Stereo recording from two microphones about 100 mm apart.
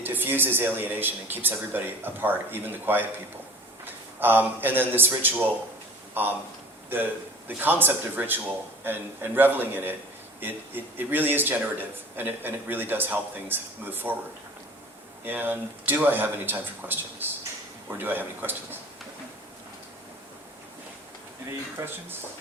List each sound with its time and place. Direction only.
0.0 s a man's voice: 20° right (ahead or behind)
15.2 s a man's voice: 20° right (ahead or behind)
21.4 s a man's voice: 25° right (ahead or behind)